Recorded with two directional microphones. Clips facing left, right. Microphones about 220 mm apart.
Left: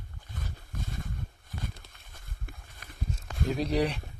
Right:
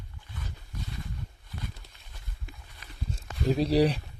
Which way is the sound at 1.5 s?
50° left (ahead or behind).